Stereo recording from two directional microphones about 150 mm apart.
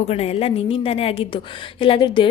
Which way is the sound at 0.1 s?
45° left (ahead or behind).